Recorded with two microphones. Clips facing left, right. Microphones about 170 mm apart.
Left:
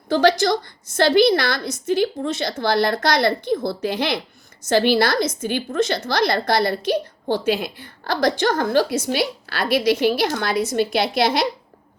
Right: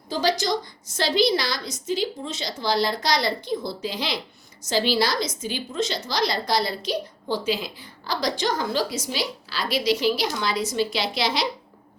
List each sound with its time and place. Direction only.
0.1 s a woman's voice: 60° left (ahead or behind)